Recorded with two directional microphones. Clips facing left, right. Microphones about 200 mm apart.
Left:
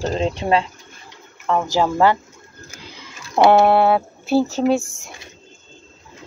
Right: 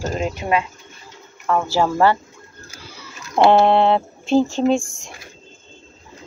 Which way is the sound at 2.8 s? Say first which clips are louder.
Even; 15° left (ahead or behind).